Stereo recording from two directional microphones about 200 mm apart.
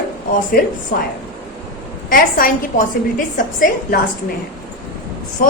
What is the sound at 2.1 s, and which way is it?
A woman's voice, 45° left (ahead or behind).